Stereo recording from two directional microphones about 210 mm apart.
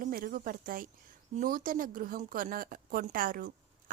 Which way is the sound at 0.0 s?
45° right (ahead or behind).